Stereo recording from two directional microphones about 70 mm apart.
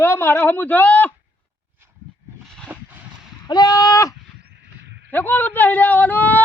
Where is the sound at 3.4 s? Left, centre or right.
Left.